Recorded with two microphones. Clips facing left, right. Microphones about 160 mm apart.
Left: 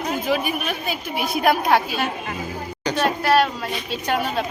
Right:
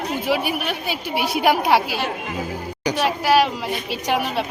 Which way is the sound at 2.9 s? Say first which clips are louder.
Right 1 dB; 10° right (ahead or behind).